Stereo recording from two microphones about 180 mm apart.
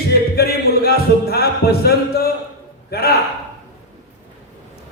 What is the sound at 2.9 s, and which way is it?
Speech, 60° left (ahead or behind).